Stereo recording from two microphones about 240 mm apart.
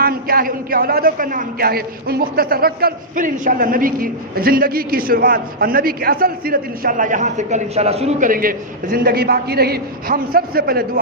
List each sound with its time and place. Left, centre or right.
0.0 s a man's voice: right